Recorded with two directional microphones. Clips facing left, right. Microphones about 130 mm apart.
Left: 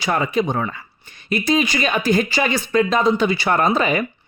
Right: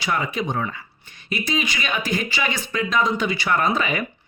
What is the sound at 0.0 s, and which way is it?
Speech, 40° left (ahead or behind).